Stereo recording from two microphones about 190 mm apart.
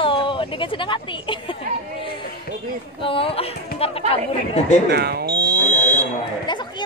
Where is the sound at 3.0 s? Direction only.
30° left (ahead or behind).